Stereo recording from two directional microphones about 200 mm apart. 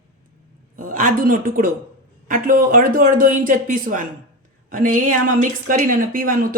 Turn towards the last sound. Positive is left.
turn(degrees=-45)  # may be behind; listen again after turning